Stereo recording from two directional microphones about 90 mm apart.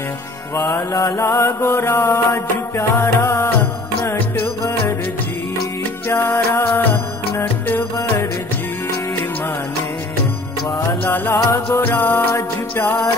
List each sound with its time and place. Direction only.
0.7 s mantra: 35° left (ahead or behind)
4.0 s music: 25° left (ahead or behind)
6.0 s music: 25° left (ahead or behind)
11.3 s music: 30° left (ahead or behind)